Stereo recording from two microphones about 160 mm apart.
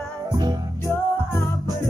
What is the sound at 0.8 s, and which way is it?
Music, 15° left (ahead or behind).